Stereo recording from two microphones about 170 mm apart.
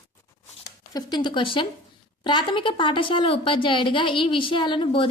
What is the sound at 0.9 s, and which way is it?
Speech, 25° left (ahead or behind).